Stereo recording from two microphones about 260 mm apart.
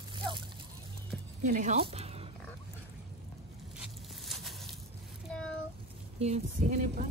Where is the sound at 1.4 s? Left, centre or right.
Right.